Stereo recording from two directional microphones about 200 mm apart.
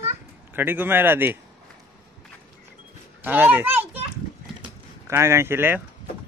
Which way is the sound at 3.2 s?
10° right (ahead or behind).